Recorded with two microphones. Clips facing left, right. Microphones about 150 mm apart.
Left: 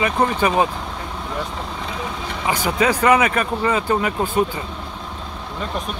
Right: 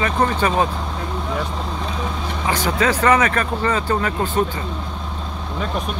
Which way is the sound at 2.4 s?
10° left (ahead or behind).